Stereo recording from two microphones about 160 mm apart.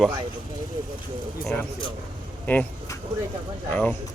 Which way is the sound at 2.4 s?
10° left (ahead or behind).